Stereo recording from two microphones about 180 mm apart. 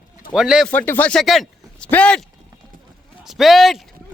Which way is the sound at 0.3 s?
5° right (ahead or behind).